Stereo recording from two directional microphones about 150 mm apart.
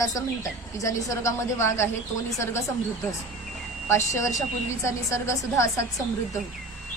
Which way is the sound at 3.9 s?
20° left (ahead or behind).